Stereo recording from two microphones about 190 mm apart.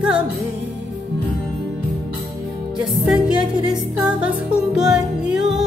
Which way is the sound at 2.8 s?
5° right (ahead or behind).